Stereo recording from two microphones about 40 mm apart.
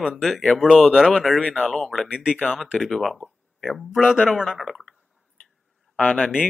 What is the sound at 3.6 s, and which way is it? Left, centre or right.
Speech, centre.